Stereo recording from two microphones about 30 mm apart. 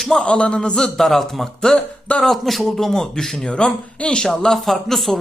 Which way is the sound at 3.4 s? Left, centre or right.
Left.